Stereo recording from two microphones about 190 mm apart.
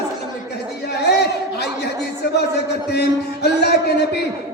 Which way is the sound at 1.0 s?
60° left (ahead or behind).